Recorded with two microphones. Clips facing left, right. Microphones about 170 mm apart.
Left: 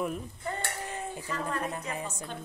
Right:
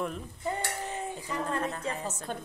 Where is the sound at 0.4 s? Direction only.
15° right (ahead or behind).